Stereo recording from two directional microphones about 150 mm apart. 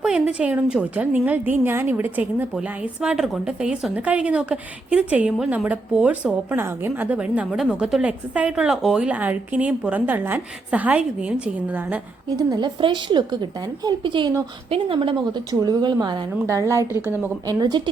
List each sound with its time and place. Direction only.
0.0 s a woman's voice: 5° right (ahead or behind)
12.4 s a woman's voice: 25° right (ahead or behind)
16.5 s a woman's voice: 20° right (ahead or behind)